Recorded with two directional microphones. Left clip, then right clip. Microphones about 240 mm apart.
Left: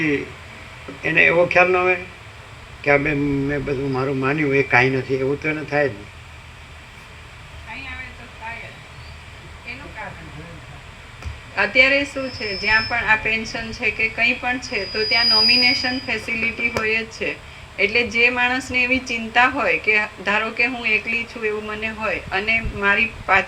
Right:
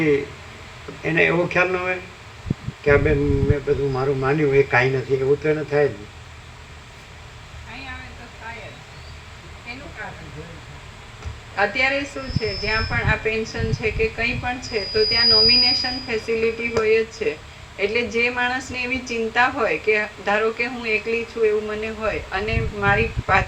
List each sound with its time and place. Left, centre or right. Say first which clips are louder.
1.0 s a woman's voice: left 4 dB; left
11.5 s a woman's voice: left 4 dB; left